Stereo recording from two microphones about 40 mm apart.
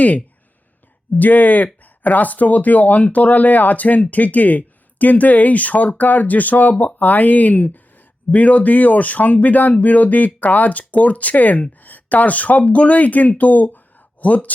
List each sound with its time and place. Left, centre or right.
1.2 s speech: left